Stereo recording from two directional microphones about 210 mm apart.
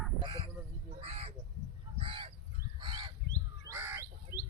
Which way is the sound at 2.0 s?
25° right (ahead or behind).